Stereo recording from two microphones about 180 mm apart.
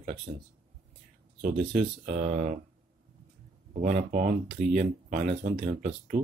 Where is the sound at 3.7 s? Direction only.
40° right (ahead or behind).